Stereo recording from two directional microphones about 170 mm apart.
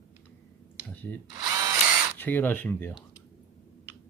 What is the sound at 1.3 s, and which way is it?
Drill, 20° right (ahead or behind).